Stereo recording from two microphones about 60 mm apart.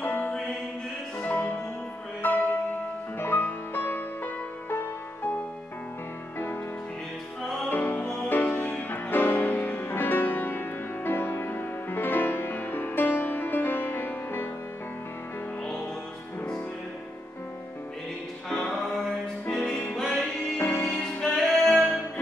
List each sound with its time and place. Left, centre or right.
0.0 s music: left
7.7 s music: left
19.5 s music: centre
20.0 s music: centre
20.5 s music: left
20.9 s music: centre
21.6 s music: centre